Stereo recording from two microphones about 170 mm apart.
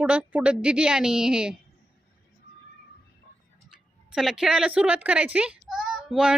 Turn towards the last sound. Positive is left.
turn(degrees=0)  # may be behind; listen again after turning